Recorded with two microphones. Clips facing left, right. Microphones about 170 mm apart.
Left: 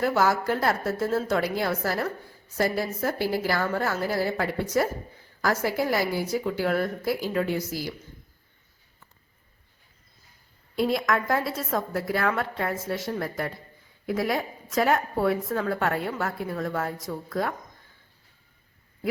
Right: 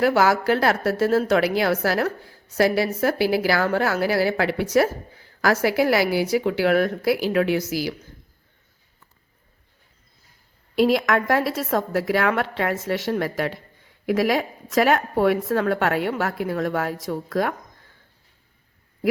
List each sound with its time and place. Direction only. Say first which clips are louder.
0.0 s a woman's voice: right 5 dB; 85° right
10.8 s a woman's voice: right 6 dB; 90° right